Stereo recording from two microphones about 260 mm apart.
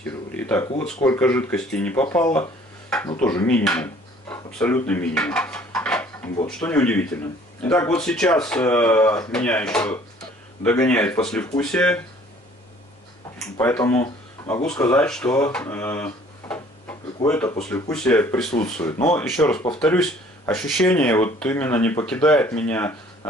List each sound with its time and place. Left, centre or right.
0.0 s speech: centre
13.6 s speech: centre
18.6 s speech: left
18.9 s speech: centre